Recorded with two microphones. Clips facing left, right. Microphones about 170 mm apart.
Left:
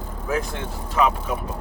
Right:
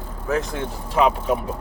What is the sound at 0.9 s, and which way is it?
Speech, 30° right (ahead or behind).